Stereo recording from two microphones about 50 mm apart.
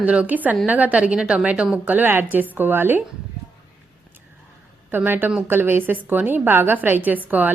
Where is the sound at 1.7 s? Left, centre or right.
Right.